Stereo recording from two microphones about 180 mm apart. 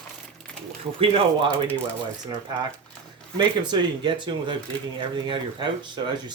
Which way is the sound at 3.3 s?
25° right (ahead or behind).